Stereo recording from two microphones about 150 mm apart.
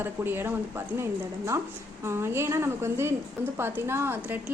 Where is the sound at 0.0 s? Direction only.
15° right (ahead or behind).